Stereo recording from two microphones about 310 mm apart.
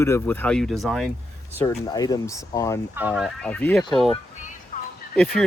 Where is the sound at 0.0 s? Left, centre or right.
Centre.